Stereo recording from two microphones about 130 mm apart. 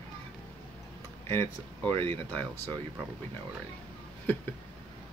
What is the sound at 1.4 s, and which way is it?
Speech, 40° right (ahead or behind).